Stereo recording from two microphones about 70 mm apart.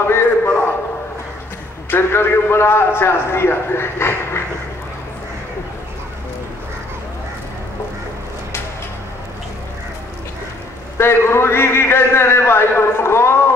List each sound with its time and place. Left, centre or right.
0.0 s a sound: left
1.9 s a man's voice: left
11.0 s a man's voice: left